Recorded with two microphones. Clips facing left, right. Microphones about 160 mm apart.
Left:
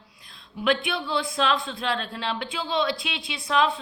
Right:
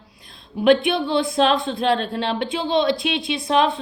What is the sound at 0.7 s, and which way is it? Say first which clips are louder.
A woman's voice: right 8 dB; 20° right (ahead or behind).